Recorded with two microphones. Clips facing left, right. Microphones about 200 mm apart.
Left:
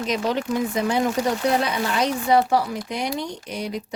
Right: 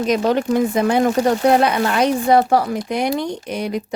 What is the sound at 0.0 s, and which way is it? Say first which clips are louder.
Speech: right 7 dB; 50° right (ahead or behind).